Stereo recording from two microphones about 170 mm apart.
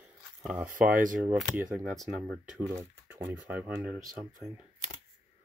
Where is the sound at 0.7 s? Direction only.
50° right (ahead or behind).